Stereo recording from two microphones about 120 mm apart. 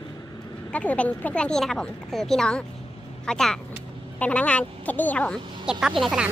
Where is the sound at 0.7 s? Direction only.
10° left (ahead or behind).